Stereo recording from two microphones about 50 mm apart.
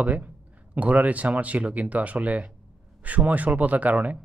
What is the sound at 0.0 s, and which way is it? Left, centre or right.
Speech, right.